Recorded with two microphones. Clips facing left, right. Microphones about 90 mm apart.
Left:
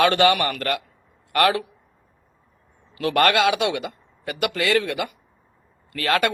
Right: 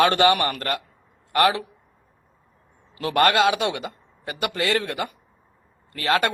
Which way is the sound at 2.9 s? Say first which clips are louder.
Even; 30° right (ahead or behind).